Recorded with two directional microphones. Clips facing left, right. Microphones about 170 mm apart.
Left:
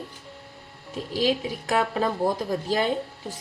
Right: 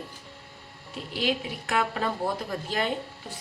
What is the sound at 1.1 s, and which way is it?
A woman's voice, 35° left (ahead or behind).